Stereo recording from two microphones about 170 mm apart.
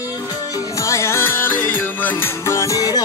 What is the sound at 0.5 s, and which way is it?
Music, 20° left (ahead or behind).